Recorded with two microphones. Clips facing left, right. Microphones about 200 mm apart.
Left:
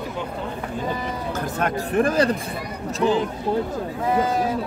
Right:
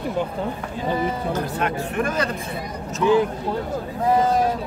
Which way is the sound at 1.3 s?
45° left (ahead or behind).